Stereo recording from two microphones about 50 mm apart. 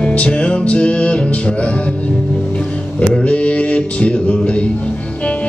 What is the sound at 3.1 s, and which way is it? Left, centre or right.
Music, left.